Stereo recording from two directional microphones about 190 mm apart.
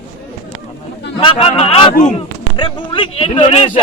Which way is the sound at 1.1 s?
30° left (ahead or behind).